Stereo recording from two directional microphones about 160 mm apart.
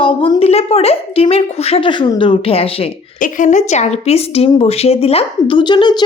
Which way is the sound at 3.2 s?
55° left (ahead or behind).